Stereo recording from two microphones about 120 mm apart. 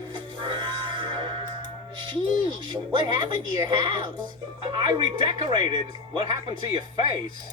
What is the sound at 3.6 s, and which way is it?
Speech, 40° right (ahead or behind).